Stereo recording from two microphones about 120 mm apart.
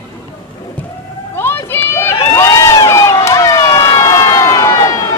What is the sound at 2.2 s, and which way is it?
Emergency vehicle, 25° left (ahead or behind).